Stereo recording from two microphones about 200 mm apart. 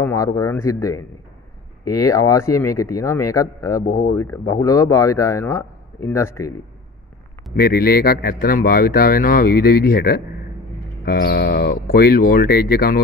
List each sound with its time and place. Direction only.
0.0 s speech: 15° left (ahead or behind)
3.8 s speech: 50° left (ahead or behind)
4.1 s speech: 15° left (ahead or behind)
7.5 s speech: 50° left (ahead or behind)